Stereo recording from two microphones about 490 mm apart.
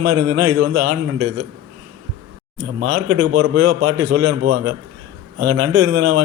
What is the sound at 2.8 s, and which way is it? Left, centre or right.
A man's voice, right.